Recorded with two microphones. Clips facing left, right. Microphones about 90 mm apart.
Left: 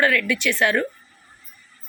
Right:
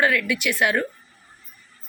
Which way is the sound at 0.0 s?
15° right (ahead or behind).